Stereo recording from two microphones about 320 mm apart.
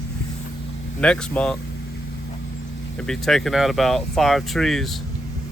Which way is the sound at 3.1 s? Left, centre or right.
Centre.